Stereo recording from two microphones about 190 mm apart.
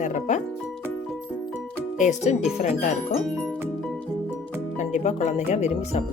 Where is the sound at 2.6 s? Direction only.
40° left (ahead or behind).